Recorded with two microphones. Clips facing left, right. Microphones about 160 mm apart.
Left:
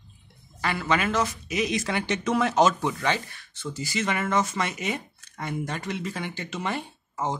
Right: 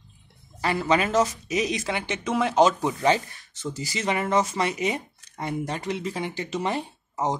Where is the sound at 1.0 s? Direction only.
40° right (ahead or behind).